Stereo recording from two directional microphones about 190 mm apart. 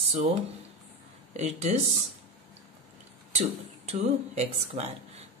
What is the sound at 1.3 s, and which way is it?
Speech, 35° right (ahead or behind).